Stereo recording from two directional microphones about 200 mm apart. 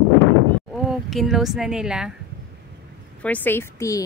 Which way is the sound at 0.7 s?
Centre (ahead or behind).